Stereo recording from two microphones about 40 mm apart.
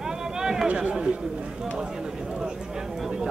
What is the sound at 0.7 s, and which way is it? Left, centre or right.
Speech, right.